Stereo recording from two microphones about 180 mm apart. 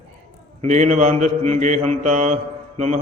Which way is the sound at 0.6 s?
40° right (ahead or behind).